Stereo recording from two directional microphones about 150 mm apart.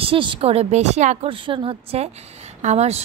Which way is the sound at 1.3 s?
35° right (ahead or behind).